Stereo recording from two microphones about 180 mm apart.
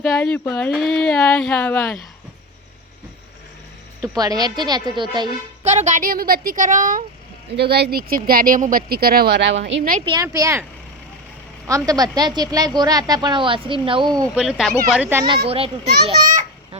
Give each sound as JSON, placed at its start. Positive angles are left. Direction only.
{"t": 0.0, "sound": "a sound", "side_deg": 5}
{"t": 4.0, "sound": "a woman's voice", "side_deg": -20}
{"t": 5.6, "sound": "speech", "side_deg": -40}
{"t": 7.5, "sound": "speech", "side_deg": -65}
{"t": 10.1, "sound": "a woman's voice", "side_deg": -20}
{"t": 14.3, "sound": "speech", "side_deg": -5}
{"t": 15.4, "sound": "a child's voice", "side_deg": -30}
{"t": 16.1, "sound": "a child's voice", "side_deg": -45}